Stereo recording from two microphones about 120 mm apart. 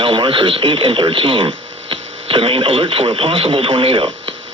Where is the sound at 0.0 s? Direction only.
45° right (ahead or behind).